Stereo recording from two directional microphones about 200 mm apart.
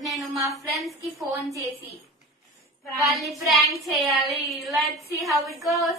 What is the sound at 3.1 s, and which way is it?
A woman's voice, centre (ahead or behind).